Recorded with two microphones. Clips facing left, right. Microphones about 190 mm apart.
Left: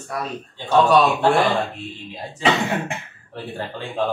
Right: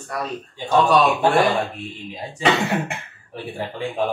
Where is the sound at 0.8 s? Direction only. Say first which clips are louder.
Left 1 dB; centre (ahead or behind).